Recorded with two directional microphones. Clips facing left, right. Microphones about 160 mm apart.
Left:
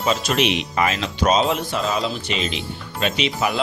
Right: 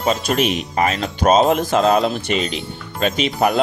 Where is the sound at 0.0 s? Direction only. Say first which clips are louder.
Right 2 dB; 45° right (ahead or behind).